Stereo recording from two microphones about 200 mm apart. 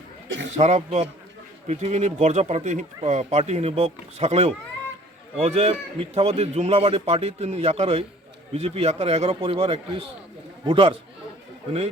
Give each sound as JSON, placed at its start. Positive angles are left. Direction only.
{"t": 0.5, "sound": "a man's voice", "side_deg": -35}